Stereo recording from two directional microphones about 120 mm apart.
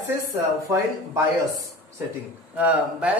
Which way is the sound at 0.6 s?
25° right (ahead or behind).